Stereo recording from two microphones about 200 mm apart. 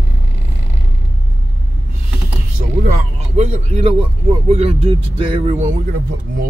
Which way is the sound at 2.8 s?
40° right (ahead or behind).